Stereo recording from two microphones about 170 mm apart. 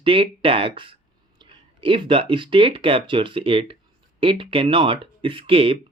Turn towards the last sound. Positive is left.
turn(degrees=-35)  # may be behind; listen again after turning